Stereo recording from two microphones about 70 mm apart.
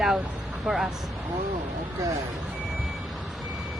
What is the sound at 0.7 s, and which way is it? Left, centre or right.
Speech, centre.